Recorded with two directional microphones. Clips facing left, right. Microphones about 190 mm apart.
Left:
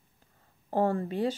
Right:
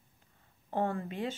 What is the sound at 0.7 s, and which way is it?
Speech, 35° left (ahead or behind).